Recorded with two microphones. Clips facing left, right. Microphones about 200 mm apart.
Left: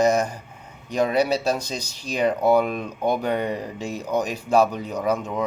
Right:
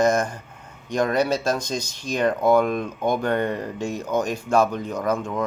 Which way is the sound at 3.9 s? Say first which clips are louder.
Even; 35° left (ahead or behind).